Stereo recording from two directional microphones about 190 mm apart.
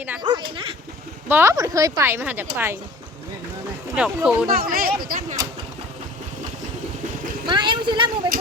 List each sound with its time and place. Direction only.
0.2 s a woman's voice: 25° right (ahead or behind)
1.3 s a woman's voice: 15° right (ahead or behind)
3.9 s speech: 5° right (ahead or behind)
4.4 s speech: 50° right (ahead or behind)
5.0 s a sound: 45° right (ahead or behind)
7.4 s a woman's voice: 25° right (ahead or behind)